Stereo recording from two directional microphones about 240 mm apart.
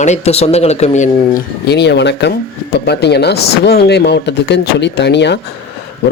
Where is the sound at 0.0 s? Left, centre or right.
Left.